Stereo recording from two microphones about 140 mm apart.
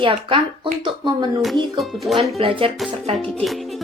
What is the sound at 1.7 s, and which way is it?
Speech, centre (ahead or behind).